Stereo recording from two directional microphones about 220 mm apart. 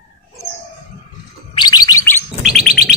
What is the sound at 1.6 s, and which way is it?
Bird, 20° left (ahead or behind).